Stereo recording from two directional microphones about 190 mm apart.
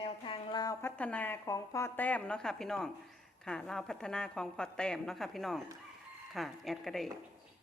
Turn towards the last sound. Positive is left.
turn(degrees=0)  # may be behind; listen again after turning